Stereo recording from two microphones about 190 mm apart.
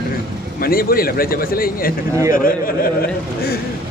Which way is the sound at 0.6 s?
50° left (ahead or behind).